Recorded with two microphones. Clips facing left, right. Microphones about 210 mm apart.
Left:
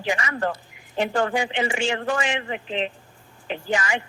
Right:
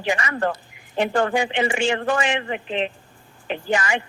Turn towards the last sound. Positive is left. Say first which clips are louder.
# right 2 dB
turn(degrees=-55)  # may be behind; listen again after turning